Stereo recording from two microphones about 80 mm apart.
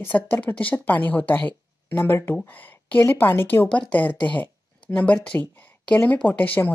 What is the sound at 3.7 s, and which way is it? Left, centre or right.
Speech, centre.